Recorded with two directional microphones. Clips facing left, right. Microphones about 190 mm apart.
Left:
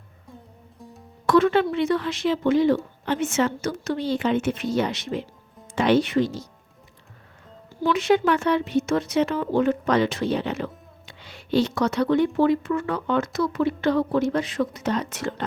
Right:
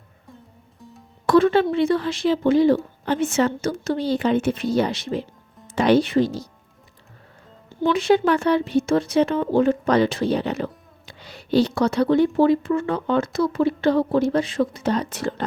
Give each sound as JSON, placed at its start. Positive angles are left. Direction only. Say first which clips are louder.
{"t": 1.3, "sound": "speech", "louder": "right 2 dB", "side_deg": -30}
{"t": 7.8, "sound": "speech", "louder": "right 2 dB", "side_deg": -30}